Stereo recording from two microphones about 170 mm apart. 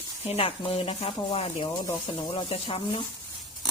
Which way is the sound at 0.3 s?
35° left (ahead or behind).